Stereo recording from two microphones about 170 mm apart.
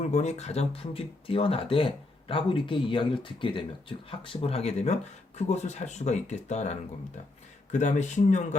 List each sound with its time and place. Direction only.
0.0 s speech: 45° left (ahead or behind)